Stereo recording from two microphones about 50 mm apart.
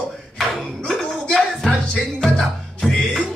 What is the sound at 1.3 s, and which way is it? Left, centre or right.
Music, centre.